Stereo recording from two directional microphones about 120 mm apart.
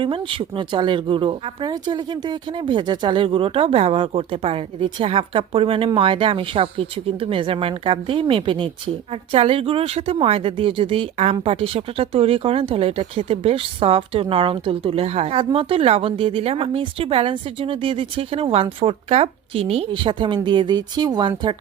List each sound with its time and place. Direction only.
0.0 s speech: 45° right (ahead or behind)